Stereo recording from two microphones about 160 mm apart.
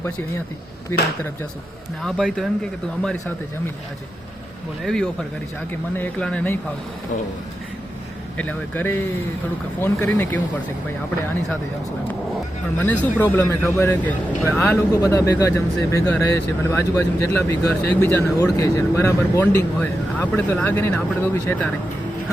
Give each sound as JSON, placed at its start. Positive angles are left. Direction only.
{"t": 0.9, "sound": "speech", "side_deg": 15}
{"t": 2.0, "sound": "speech", "side_deg": 0}
{"t": 4.8, "sound": "speech", "side_deg": 0}
{"t": 8.4, "sound": "speech", "side_deg": 10}
{"t": 12.7, "sound": "speech", "side_deg": 10}